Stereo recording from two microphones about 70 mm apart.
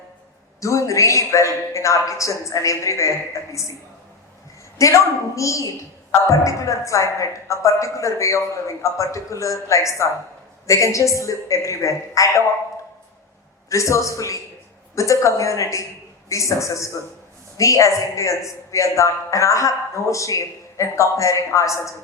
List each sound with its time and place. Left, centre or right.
0.6 s a woman's voice: left
4.8 s a woman's voice: left
13.7 s a woman's voice: left